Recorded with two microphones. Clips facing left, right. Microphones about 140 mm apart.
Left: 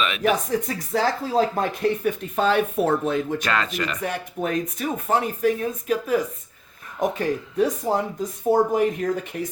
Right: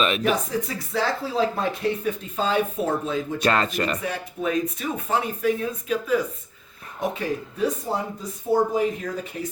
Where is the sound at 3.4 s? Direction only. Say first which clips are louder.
Right 3 dB; 40° right (ahead or behind).